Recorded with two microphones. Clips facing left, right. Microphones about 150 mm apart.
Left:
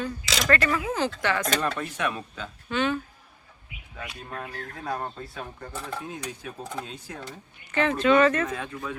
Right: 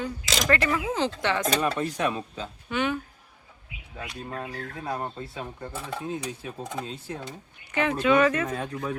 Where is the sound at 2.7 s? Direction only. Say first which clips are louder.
Left 1 dB; 15° right (ahead or behind).